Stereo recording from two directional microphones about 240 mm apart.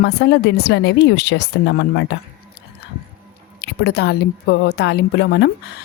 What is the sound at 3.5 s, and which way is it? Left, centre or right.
Speech, left.